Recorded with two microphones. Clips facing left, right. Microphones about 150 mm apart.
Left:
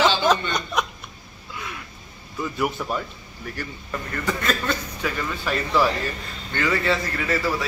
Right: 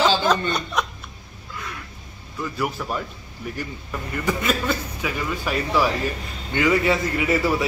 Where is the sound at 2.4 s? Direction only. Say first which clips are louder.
Left 1 dB; 5° left (ahead or behind).